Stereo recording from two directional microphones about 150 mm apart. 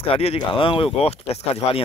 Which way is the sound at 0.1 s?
40° left (ahead or behind).